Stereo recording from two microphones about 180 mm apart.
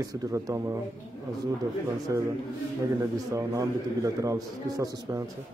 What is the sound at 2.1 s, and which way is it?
A man's voice, 15° right (ahead or behind).